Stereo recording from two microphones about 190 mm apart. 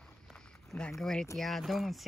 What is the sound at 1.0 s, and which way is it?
Speech, centre (ahead or behind).